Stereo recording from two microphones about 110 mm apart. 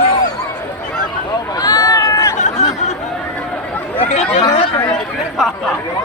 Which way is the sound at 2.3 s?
90° left.